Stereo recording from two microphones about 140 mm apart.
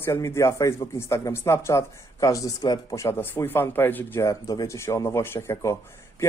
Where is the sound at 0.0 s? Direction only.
20° left (ahead or behind).